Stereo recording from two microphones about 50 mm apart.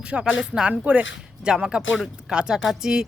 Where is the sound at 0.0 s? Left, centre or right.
Centre.